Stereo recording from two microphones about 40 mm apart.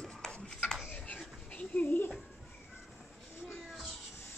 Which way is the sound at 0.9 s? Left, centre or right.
Left.